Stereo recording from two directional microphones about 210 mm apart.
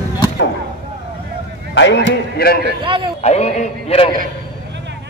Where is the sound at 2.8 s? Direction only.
25° right (ahead or behind).